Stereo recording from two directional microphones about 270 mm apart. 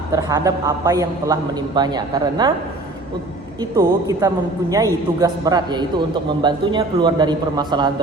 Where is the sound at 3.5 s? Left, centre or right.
Centre.